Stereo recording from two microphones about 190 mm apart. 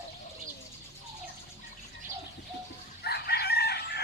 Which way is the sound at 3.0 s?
60° left (ahead or behind).